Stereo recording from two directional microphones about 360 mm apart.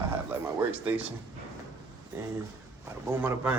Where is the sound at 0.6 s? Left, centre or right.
Centre.